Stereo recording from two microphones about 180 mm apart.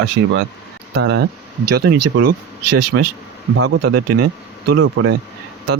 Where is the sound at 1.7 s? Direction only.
65° right (ahead or behind).